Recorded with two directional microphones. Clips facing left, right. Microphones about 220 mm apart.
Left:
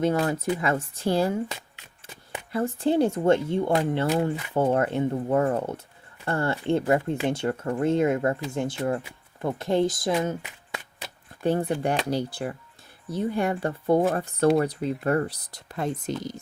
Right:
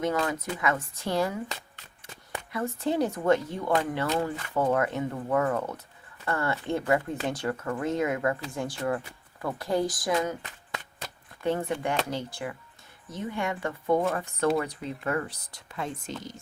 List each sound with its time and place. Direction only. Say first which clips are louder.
0.0 s speech: left 4 dB; 35° left (ahead or behind)
2.5 s speech: left 5 dB; 30° left (ahead or behind)
11.4 s speech: left 4 dB; 35° left (ahead or behind)